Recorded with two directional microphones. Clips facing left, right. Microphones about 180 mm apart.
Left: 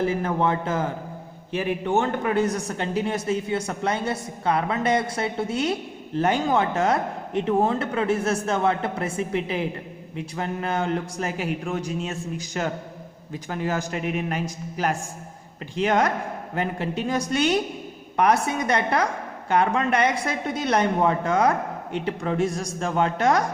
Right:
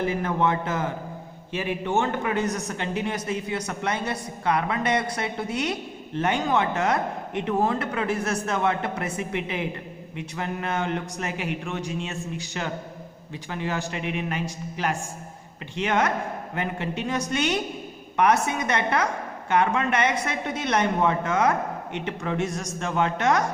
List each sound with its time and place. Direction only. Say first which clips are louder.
0.0 s a man's voice: left 1 dB; 35° left (ahead or behind)